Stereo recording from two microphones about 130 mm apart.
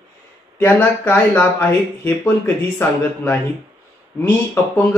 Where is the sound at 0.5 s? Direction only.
15° left (ahead or behind).